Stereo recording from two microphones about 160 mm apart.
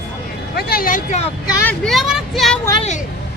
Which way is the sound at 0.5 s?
70° left (ahead or behind).